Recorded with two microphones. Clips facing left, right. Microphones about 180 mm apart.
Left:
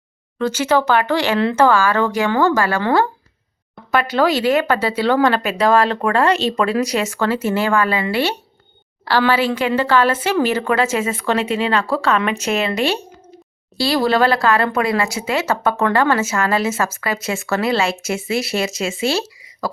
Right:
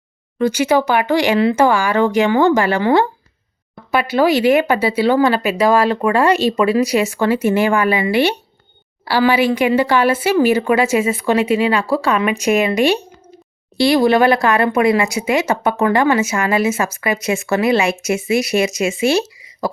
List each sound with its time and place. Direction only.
0.3 s speech: 15° right (ahead or behind)